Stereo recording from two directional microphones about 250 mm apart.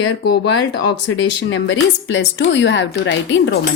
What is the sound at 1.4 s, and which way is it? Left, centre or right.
A woman's voice, left.